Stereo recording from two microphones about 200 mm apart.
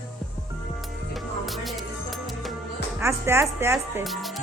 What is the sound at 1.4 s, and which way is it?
Music, centre (ahead or behind).